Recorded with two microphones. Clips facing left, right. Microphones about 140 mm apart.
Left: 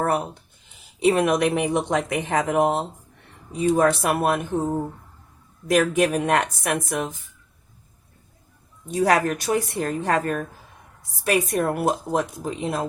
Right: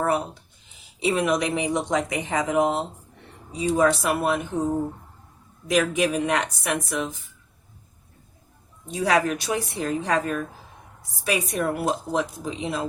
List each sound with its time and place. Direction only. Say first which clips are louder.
0.9 s speech: left 4 dB; 55° left (ahead or behind)
5.6 s speech: left 3 dB; 50° left (ahead or behind)
8.9 s speech: left 2 dB; 45° left (ahead or behind)